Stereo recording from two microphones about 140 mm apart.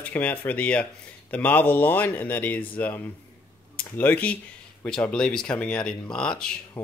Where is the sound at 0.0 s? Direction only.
10° left (ahead or behind).